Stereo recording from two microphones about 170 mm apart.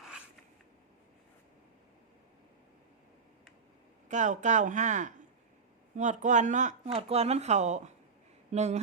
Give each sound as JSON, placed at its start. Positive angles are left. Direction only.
{"t": 4.1, "sound": "speech", "side_deg": -45}
{"t": 8.5, "sound": "mantra", "side_deg": -40}